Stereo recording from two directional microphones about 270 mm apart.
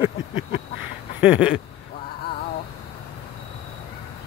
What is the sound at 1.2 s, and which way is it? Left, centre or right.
Speech, centre.